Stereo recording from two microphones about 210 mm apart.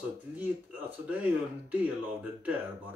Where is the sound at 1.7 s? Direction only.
5° right (ahead or behind).